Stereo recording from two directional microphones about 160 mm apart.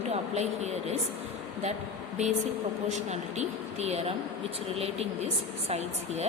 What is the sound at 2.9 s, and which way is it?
Speech, 45° right (ahead or behind).